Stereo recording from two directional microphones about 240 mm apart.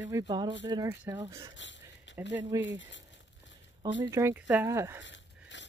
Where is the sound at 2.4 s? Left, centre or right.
Centre.